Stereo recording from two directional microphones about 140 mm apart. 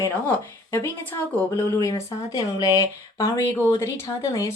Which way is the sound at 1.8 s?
25° left (ahead or behind).